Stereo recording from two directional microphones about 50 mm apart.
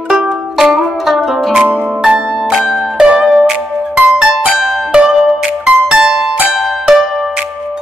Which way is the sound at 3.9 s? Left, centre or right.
Right.